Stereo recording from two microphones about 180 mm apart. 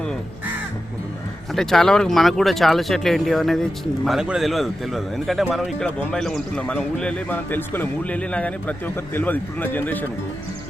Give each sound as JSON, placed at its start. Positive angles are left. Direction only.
{"t": 1.5, "sound": "speech", "side_deg": 0}